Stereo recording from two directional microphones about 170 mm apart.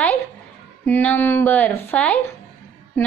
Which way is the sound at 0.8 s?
10° left (ahead or behind).